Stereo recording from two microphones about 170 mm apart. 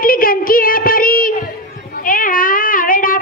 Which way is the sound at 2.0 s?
55° left (ahead or behind).